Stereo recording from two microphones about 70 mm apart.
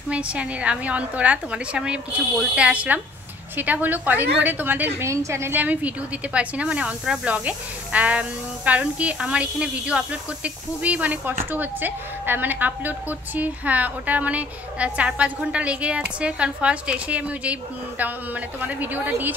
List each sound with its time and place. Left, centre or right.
0.1 s a woman's voice: centre
4.9 s a woman's voice: right
5.6 s a woman's voice: right